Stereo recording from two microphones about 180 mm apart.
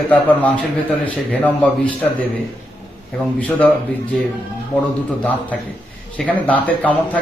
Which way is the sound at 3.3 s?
10° left (ahead or behind).